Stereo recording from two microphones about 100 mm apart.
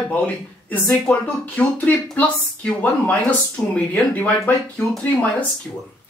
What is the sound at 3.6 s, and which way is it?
Speech, 10° left (ahead or behind).